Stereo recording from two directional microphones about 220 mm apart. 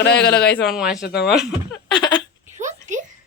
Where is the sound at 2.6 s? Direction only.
35° right (ahead or behind).